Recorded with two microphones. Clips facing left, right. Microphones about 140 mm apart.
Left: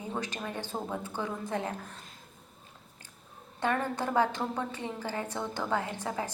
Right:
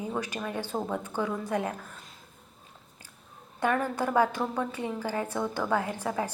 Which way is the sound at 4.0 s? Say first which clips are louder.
Right 3 dB; 10° right (ahead or behind).